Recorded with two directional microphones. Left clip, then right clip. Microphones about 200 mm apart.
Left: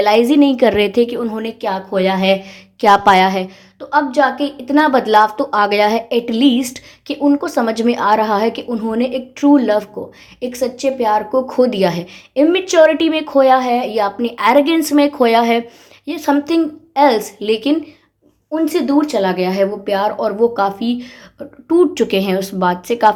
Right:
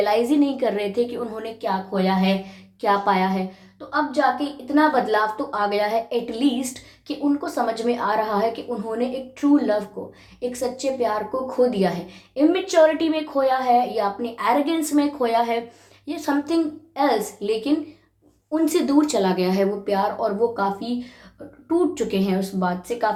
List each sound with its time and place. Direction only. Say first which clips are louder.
0.0 s a woman's voice: left 8 dB; 40° left (ahead or behind)
18.5 s a woman's voice: left 4 dB; 20° left (ahead or behind); by 23.0 s 50° left (ahead or behind)